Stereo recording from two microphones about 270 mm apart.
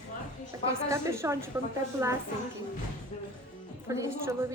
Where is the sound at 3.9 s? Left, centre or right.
Centre.